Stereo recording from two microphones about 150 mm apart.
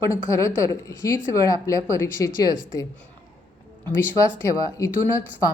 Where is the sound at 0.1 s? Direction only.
20° left (ahead or behind).